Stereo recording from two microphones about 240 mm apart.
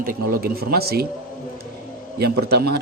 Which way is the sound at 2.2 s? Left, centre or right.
Right.